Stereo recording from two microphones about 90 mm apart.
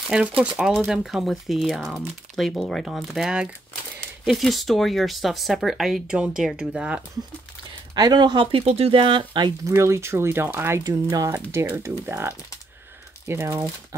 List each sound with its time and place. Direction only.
0.4 s speech: 10° right (ahead or behind)
7.9 s speech: 50° right (ahead or behind); by 9.5 s 65° right (ahead or behind)
9.7 s speech: 30° right (ahead or behind)
10.8 s speech: 45° right (ahead or behind)
12.1 s speech: 30° right (ahead or behind)